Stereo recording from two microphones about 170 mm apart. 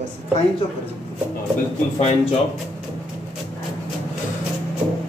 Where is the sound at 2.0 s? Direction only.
35° left (ahead or behind).